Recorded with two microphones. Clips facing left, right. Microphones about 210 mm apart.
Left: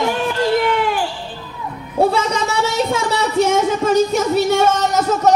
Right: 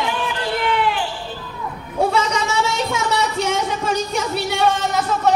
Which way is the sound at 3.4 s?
45° left (ahead or behind).